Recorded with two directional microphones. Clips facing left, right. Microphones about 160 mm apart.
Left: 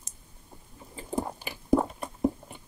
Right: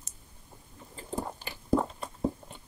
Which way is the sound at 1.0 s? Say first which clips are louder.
Left 4 dB; 15° left (ahead or behind).